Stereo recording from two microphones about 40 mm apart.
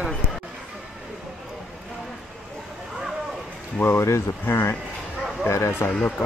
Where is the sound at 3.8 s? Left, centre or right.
Left.